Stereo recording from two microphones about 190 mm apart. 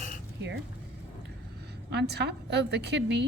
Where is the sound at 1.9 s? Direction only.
60° right (ahead or behind).